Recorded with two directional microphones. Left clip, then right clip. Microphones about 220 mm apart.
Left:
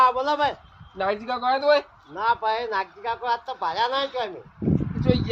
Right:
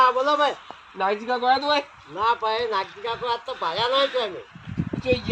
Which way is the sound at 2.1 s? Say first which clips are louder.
Right 1 dB; centre (ahead or behind).